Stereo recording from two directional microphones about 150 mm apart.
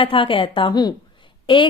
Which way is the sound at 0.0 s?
35° left (ahead or behind).